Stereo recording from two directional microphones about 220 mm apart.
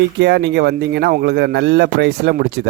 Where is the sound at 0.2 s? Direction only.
50° right (ahead or behind).